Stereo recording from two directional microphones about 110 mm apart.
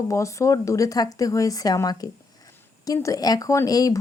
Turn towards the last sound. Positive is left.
turn(degrees=35)  # may be behind; listen again after turning